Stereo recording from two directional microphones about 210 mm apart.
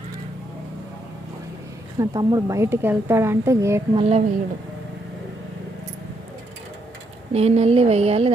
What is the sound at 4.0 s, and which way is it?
Speech, 30° right (ahead or behind).